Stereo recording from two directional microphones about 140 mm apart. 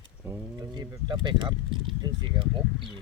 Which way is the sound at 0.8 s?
35° right (ahead or behind).